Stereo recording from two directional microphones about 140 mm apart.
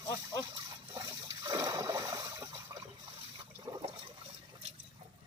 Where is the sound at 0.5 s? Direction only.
30° right (ahead or behind).